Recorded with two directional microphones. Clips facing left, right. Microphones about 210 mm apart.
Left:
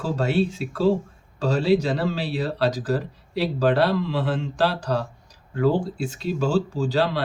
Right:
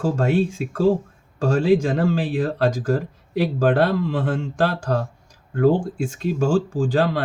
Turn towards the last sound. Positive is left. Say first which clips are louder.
# right 3 dB
turn(degrees=-50)  # may be behind; listen again after turning